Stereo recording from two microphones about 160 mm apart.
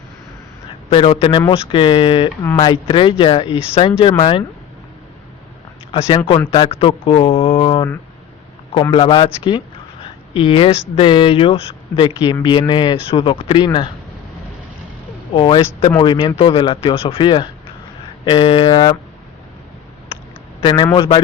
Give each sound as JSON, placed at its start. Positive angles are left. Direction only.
{"t": 0.7, "sound": "a man's voice", "side_deg": 35}
{"t": 5.9, "sound": "a man's voice", "side_deg": 35}
{"t": 15.4, "sound": "a man's voice", "side_deg": 30}
{"t": 20.6, "sound": "a man's voice", "side_deg": 30}